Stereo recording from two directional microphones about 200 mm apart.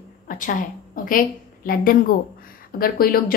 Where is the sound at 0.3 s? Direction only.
40° left (ahead or behind).